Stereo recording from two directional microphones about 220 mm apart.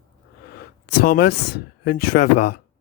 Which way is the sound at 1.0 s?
45° left (ahead or behind).